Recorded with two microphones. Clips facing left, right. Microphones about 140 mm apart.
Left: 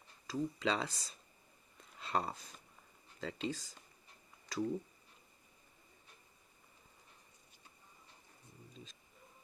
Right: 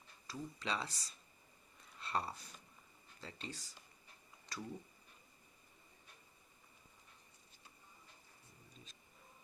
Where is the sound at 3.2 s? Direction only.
90° left.